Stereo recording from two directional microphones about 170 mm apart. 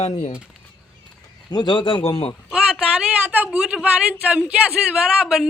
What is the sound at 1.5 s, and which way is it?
Speech, 25° left (ahead or behind).